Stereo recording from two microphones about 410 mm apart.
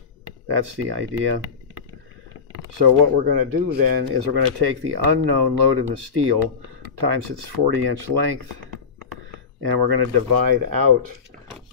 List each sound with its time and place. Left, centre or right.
0.5 s speech: right
2.8 s speech: right
9.6 s speech: right